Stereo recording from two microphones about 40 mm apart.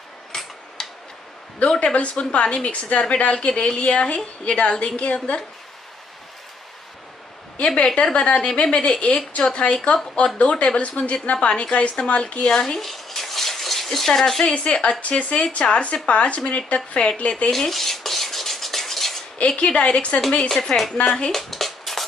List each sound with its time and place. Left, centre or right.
0.3 s tick-tock: centre
1.6 s a woman's voice: left
7.5 s a woman's voice: left; by 14.4 s centre
14.4 s speech: left
17.5 s cutlery: centre
19.3 s a woman's voice: left
20.3 s speech: centre
21.3 s a sound: centre